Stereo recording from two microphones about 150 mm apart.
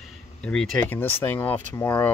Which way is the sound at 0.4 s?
5° left (ahead or behind).